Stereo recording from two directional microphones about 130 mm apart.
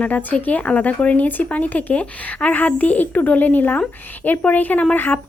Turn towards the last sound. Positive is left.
turn(degrees=15)  # may be behind; listen again after turning